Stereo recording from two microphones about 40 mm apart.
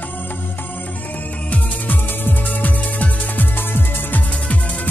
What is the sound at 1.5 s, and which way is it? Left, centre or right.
Music, left.